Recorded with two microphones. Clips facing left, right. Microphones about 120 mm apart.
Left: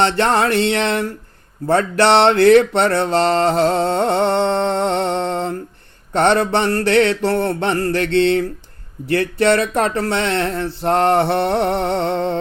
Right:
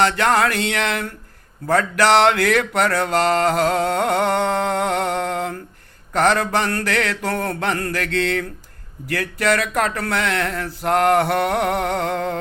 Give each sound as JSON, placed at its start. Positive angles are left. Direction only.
{"t": 0.0, "sound": "mantra", "side_deg": 30}